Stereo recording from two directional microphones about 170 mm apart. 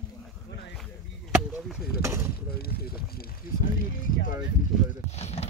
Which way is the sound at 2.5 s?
65° left (ahead or behind).